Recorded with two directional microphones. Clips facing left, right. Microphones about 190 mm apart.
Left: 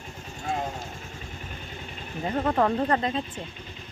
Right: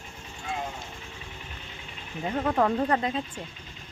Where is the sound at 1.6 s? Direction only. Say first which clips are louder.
Left 5 dB; 45° left (ahead or behind).